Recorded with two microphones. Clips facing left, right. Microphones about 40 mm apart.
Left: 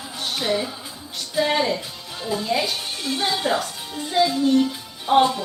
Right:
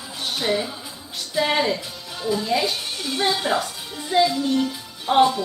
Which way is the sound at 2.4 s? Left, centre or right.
Centre.